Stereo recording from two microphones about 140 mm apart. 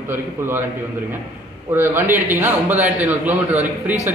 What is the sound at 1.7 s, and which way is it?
A man's voice, 15° right (ahead or behind).